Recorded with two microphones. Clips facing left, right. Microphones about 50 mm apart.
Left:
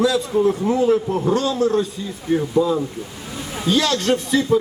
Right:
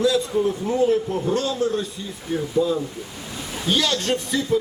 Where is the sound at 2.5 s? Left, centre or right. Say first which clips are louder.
Left 1 dB; left.